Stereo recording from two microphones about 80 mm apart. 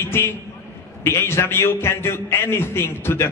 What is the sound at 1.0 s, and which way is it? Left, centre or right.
A man's voice, left.